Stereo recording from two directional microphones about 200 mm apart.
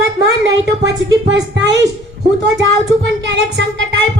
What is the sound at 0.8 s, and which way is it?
Music, 60° right (ahead or behind).